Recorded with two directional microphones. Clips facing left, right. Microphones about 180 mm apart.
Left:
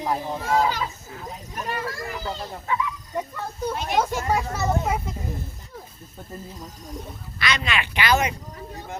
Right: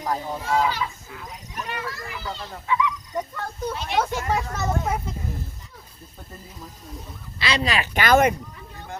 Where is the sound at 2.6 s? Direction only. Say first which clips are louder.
Right 3 dB; 45° left (ahead or behind).